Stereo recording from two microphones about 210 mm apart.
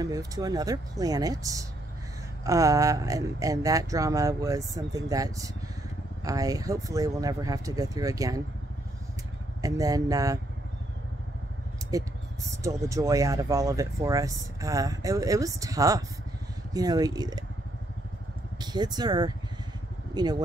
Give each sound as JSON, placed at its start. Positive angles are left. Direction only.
{"t": 0.0, "sound": "speech", "side_deg": -15}
{"t": 9.6, "sound": "speech", "side_deg": -15}
{"t": 11.9, "sound": "speech", "side_deg": -15}
{"t": 18.6, "sound": "speech", "side_deg": -20}